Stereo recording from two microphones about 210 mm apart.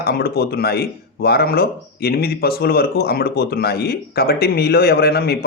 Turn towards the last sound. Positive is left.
turn(degrees=50)  # may be behind; listen again after turning